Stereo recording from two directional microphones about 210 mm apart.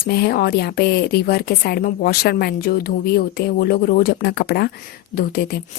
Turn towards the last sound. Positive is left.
turn(degrees=50)  # may be behind; listen again after turning